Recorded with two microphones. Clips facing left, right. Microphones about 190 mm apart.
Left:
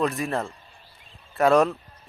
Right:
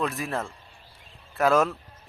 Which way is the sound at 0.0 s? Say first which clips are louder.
Left 4 dB; centre (ahead or behind).